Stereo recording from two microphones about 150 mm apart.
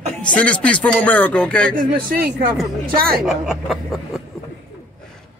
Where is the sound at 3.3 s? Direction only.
Centre (ahead or behind).